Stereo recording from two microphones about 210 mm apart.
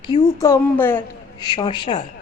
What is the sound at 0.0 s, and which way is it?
A woman's voice, 20° left (ahead or behind).